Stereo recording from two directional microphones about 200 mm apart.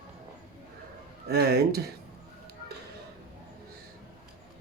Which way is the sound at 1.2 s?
50° right (ahead or behind).